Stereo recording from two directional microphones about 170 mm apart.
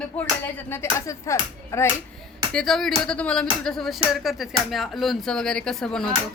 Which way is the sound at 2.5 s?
Centre (ahead or behind).